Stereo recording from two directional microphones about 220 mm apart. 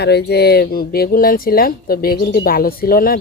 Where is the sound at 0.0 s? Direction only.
50° left (ahead or behind).